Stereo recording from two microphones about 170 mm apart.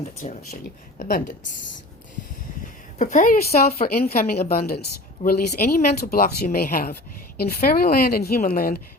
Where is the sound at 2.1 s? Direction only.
50° left (ahead or behind).